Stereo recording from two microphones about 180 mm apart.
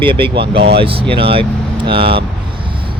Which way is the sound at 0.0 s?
30° right (ahead or behind).